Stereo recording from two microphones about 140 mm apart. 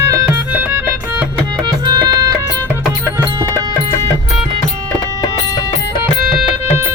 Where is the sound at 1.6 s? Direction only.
30° right (ahead or behind).